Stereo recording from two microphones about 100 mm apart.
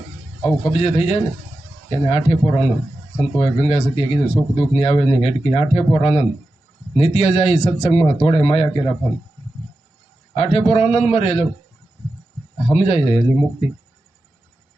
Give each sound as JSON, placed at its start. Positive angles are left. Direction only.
{"t": 0.6, "sound": "speech", "side_deg": 85}
{"t": 10.3, "sound": "speech", "side_deg": 85}
{"t": 12.7, "sound": "speech", "side_deg": 90}